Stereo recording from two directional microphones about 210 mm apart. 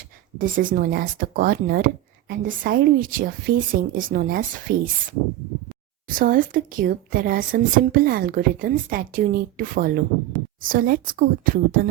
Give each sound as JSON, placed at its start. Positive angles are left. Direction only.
{"t": 0.3, "sound": "speech", "side_deg": -40}
{"t": 6.1, "sound": "speech", "side_deg": -40}